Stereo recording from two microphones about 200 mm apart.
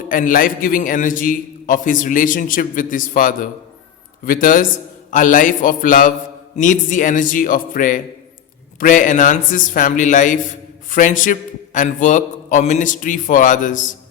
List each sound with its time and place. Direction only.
0.1 s a man's voice: 40° left (ahead or behind)